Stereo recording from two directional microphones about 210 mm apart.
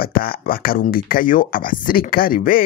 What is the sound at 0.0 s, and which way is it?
Speech, 45° left (ahead or behind).